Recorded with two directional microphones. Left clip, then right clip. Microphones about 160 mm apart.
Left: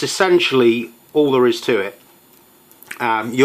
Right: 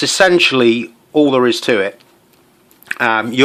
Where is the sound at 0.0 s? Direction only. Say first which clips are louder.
Right 4 dB; 55° right (ahead or behind).